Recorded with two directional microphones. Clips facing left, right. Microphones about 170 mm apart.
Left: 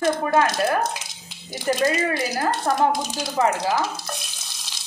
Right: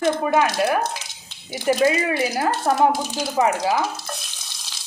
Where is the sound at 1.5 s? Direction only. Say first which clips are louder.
Right 3 dB; 10° right (ahead or behind).